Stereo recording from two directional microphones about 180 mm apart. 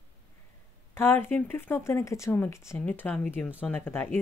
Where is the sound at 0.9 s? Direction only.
10° left (ahead or behind).